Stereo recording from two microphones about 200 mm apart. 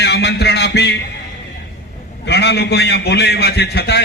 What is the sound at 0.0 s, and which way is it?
Music, 55° left (ahead or behind).